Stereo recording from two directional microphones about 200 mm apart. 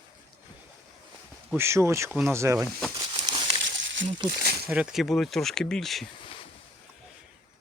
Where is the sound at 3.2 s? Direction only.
25° right (ahead or behind).